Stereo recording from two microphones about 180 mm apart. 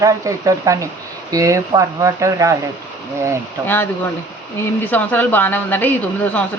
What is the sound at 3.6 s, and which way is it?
Speech, 10° left (ahead or behind).